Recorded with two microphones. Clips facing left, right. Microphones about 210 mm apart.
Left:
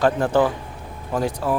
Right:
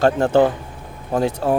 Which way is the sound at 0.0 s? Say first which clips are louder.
Right 3 dB; 25° right (ahead or behind).